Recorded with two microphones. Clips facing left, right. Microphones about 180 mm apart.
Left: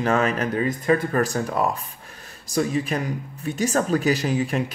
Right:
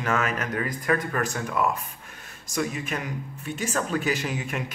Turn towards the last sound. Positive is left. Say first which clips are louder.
# left 7 dB
turn(degrees=35)  # may be behind; listen again after turning